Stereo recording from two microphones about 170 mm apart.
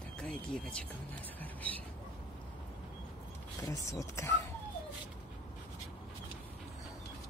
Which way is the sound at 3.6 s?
20° left (ahead or behind).